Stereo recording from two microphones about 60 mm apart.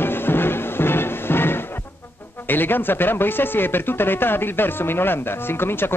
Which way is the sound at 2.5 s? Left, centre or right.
Left.